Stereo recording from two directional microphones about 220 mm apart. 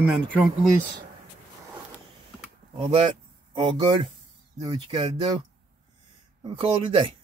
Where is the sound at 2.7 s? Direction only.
25° right (ahead or behind).